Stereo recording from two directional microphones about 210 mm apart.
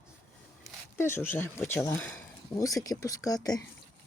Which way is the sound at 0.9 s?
10° left (ahead or behind).